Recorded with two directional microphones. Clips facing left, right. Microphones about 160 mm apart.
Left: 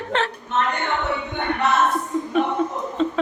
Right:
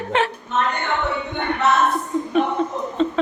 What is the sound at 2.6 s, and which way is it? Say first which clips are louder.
Chuckle: even; 10° left (ahead or behind).